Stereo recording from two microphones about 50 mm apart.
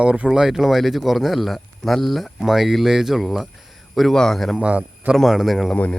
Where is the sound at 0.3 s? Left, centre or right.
Centre.